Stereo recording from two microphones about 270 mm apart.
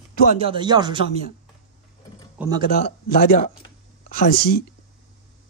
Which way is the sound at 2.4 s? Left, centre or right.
Centre.